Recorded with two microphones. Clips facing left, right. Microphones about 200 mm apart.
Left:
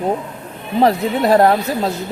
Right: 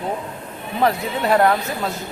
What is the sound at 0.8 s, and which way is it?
Speech, 35° left (ahead or behind).